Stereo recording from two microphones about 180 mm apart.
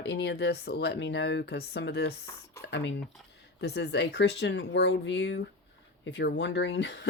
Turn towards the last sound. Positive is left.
turn(degrees=75)  # may be behind; listen again after turning